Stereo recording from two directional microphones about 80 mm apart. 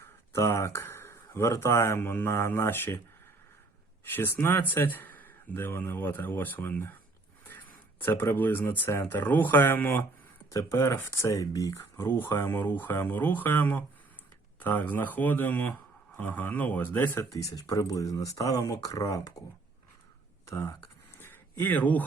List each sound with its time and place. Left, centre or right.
0.0 s speech: left
4.0 s speech: left
10.5 s speech: left
11.9 s speech: left
17.3 s speech: left
21.2 s a sound: left